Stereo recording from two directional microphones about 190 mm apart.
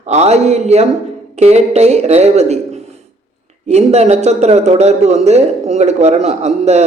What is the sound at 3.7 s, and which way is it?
Speech, 35° right (ahead or behind).